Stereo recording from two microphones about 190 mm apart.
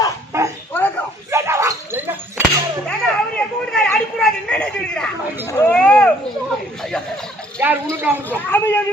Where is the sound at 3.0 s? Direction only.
5° left (ahead or behind).